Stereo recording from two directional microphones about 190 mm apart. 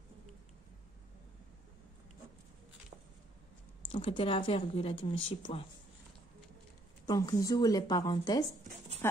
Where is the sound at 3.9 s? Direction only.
25° left (ahead or behind).